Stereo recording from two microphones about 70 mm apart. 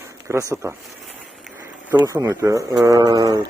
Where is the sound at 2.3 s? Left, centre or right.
Right.